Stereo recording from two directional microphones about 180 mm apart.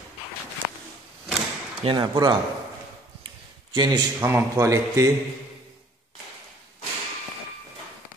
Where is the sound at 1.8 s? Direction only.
25° right (ahead or behind).